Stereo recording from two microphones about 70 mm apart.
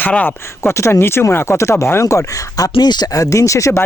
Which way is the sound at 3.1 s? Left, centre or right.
Left.